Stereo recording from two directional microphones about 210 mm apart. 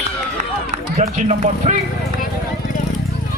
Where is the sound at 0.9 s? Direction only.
30° right (ahead or behind).